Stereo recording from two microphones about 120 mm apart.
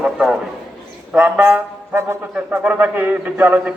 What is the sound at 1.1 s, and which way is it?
Speech, 15° right (ahead or behind).